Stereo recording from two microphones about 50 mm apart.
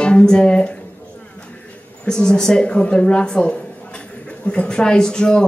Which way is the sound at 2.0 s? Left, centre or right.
Centre.